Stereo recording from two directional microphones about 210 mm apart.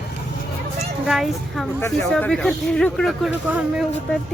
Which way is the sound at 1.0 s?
Centre (ahead or behind).